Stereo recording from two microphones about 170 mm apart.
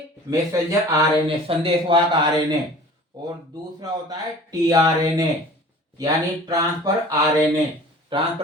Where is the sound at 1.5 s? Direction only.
30° right (ahead or behind).